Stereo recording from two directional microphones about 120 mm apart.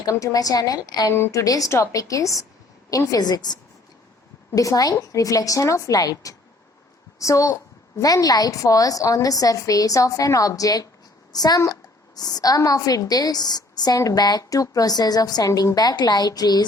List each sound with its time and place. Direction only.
0.0 s a woman's voice: 30° left (ahead or behind)
1.1 s a woman's voice: 20° left (ahead or behind)